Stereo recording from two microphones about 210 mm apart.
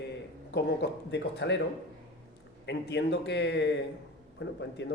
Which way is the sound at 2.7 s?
55° left (ahead or behind).